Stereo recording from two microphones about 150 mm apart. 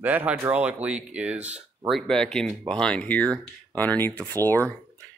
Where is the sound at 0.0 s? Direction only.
10° right (ahead or behind).